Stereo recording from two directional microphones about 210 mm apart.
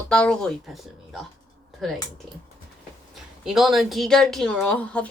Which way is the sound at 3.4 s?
Centre (ahead or behind).